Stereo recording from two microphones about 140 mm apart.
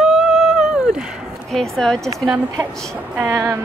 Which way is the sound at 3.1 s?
15° right (ahead or behind).